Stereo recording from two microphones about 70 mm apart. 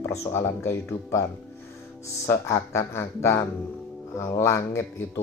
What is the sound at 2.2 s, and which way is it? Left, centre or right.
Speech, left.